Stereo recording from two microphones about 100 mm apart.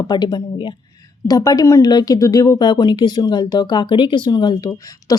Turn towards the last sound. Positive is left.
turn(degrees=40)  # may be behind; listen again after turning